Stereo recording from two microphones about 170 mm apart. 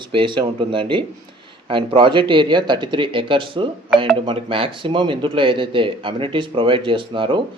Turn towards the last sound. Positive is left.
turn(degrees=-30)  # may be behind; listen again after turning